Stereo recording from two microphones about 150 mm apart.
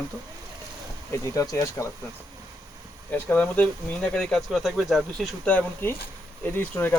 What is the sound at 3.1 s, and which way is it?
Speech, 15° left (ahead or behind).